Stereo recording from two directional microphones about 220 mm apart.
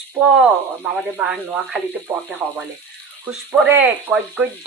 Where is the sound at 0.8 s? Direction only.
5° right (ahead or behind).